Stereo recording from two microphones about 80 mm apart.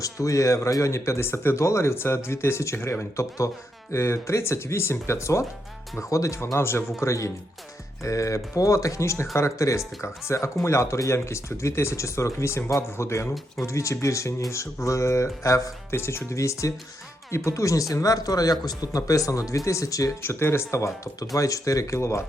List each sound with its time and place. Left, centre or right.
0.0 s speech: left
20.2 s speech: left